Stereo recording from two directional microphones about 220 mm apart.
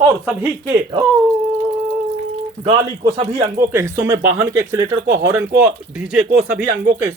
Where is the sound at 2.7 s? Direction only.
25° right (ahead or behind).